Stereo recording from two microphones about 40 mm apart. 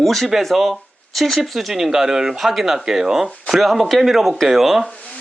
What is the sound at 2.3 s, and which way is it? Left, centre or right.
Speech, centre.